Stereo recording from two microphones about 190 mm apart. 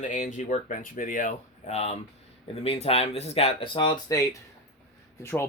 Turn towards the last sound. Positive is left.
turn(degrees=10)  # may be behind; listen again after turning